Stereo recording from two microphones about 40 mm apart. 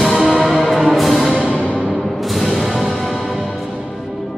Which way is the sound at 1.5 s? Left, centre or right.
Left.